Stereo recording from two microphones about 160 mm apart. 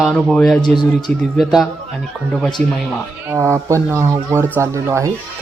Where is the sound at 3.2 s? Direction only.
15° right (ahead or behind).